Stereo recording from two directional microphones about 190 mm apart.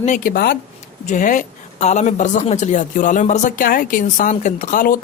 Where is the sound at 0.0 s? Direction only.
45° left (ahead or behind).